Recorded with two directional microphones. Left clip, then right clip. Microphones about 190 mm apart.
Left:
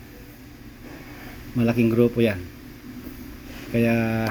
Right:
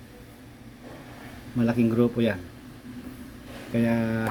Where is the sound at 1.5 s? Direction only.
Centre (ahead or behind).